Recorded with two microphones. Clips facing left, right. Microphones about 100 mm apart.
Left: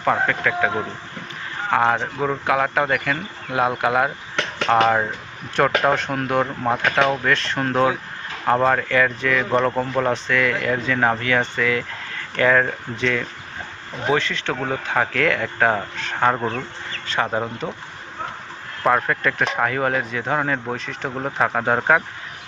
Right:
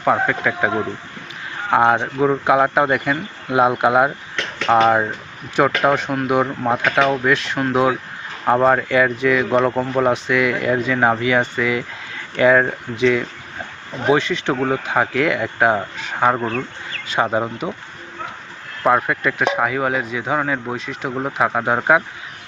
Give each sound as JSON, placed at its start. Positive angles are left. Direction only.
{"t": 0.0, "sound": "speech", "side_deg": -10}
{"t": 1.7, "sound": "speech", "side_deg": -20}
{"t": 18.8, "sound": "speech", "side_deg": -10}